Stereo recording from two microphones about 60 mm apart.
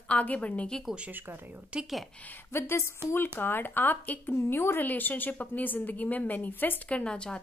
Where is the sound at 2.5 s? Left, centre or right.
Left.